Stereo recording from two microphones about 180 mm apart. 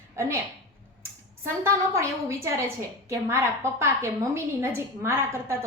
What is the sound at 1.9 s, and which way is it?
A woman's voice, 15° right (ahead or behind).